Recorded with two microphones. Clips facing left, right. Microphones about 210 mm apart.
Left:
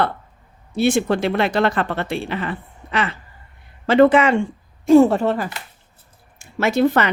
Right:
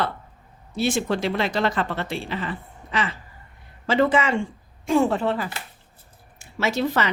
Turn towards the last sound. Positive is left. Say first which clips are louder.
# left 6 dB
turn(degrees=55)  # may be behind; listen again after turning